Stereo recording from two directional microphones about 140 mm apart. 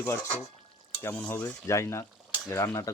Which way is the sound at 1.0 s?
10° left (ahead or behind).